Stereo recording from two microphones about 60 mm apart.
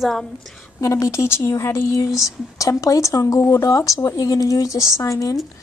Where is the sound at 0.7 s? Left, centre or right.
Left.